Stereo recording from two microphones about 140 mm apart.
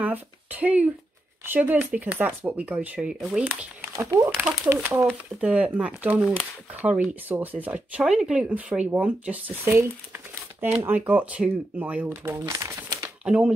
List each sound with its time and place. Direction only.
0.0 s speech: 10° right (ahead or behind)
3.9 s speech: 20° right (ahead or behind)
13.2 s speech: 10° right (ahead or behind)